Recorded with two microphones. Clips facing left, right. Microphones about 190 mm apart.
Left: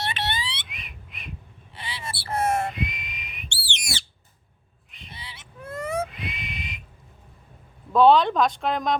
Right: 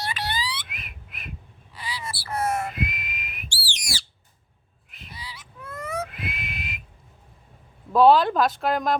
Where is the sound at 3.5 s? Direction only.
25° left (ahead or behind).